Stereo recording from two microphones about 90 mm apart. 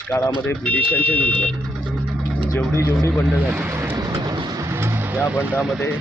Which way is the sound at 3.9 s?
40° right (ahead or behind).